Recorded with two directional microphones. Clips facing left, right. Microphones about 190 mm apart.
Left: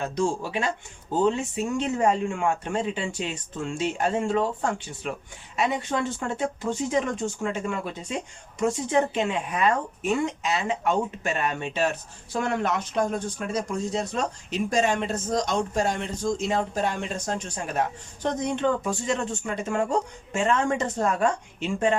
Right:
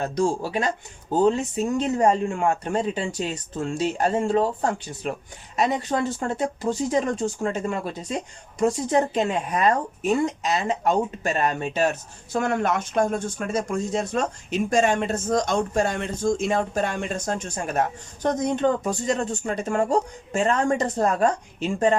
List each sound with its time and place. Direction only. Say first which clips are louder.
0.0 s speech: right 3 dB; 40° right (ahead or behind)